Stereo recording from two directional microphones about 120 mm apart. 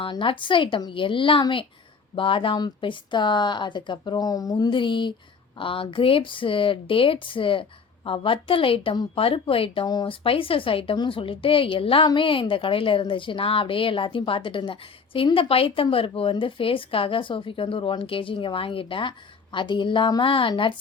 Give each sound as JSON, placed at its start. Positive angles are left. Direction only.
{"t": 0.0, "sound": "a woman's voice", "side_deg": 45}
{"t": 9.8, "sound": "a woman's voice", "side_deg": 40}